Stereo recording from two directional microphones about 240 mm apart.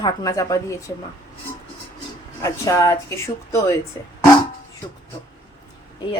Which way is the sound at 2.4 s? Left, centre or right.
Centre.